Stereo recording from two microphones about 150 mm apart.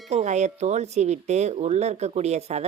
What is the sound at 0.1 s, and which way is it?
Speech, 50° right (ahead or behind).